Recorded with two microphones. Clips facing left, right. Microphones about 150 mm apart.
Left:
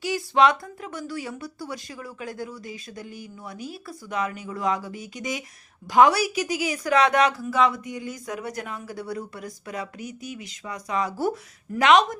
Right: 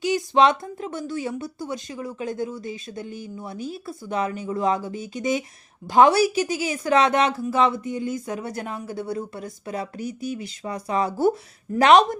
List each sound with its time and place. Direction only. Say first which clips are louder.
0.0 s a woman's voice: right 2 dB; 20° right (ahead or behind)